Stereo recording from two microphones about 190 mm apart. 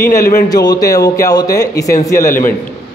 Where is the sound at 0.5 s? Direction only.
20° left (ahead or behind).